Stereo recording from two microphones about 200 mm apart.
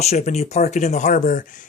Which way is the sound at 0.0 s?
35° left (ahead or behind).